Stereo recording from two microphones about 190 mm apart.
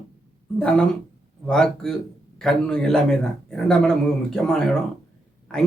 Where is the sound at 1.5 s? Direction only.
5° left (ahead or behind).